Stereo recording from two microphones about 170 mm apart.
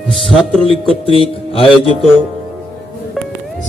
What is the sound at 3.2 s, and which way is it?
Music, centre (ahead or behind).